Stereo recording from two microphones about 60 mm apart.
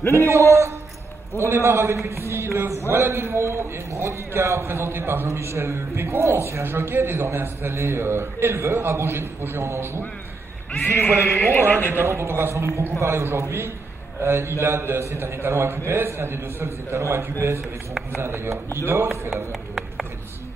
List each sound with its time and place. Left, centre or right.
0.1 s a man's voice: right
0.5 s a sound: right
1.4 s a man's voice: right
11.4 s speech: left
11.8 s a man's voice: right
19.3 s music: centre